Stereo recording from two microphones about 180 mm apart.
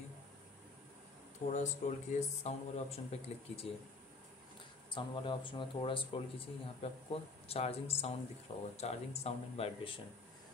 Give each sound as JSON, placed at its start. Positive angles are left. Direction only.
{"t": 1.5, "sound": "speech", "side_deg": 40}
{"t": 4.9, "sound": "speech", "side_deg": 25}